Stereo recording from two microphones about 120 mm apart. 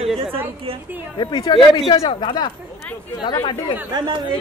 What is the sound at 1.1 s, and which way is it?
Speech, 35° left (ahead or behind).